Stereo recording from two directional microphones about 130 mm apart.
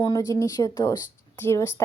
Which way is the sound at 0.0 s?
30° left (ahead or behind).